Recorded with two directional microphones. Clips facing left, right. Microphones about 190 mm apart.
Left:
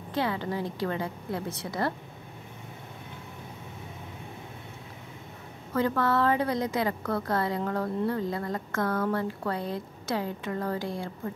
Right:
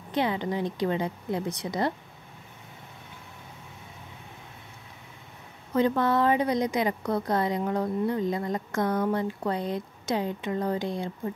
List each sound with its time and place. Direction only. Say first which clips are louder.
0.1 s a woman's voice: right 2 dB; 20° right (ahead or behind)
5.7 s a woman's voice: right 2 dB; 20° right (ahead or behind)